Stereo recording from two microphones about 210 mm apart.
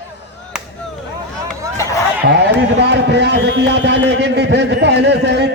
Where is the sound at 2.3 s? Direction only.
55° right (ahead or behind).